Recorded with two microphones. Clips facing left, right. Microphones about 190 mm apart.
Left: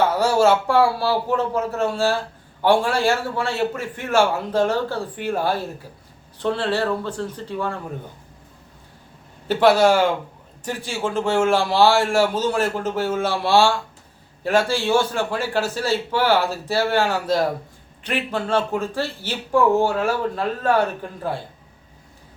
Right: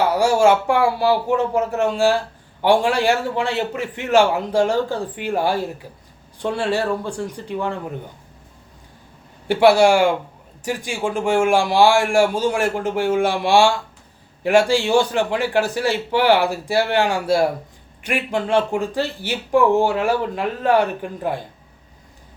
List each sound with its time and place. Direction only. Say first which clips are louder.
0.1 s speech: right 2 dB; 15° right (ahead or behind)
9.5 s speech: right 2 dB; 10° right (ahead or behind)